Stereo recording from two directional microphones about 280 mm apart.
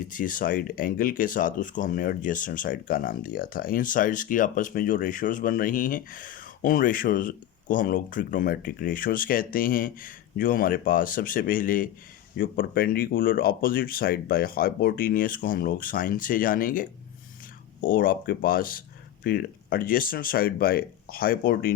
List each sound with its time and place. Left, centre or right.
0.0 s speech: left